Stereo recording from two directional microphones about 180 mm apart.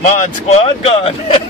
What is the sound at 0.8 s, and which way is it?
Speech, 30° left (ahead or behind).